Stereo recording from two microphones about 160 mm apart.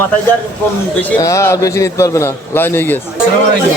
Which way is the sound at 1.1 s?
20° left (ahead or behind).